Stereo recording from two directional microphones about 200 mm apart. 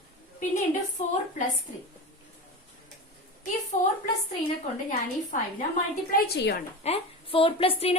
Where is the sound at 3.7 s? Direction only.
35° left (ahead or behind); by 6.6 s 55° left (ahead or behind).